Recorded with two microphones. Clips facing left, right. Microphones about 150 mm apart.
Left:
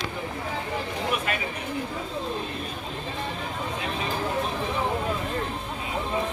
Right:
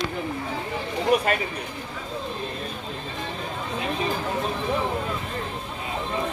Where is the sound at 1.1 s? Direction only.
40° right (ahead or behind).